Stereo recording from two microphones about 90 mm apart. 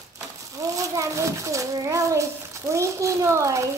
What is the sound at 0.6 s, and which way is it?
A child's voice, 35° right (ahead or behind).